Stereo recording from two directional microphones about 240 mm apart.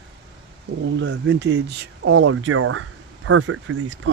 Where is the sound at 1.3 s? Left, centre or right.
Right.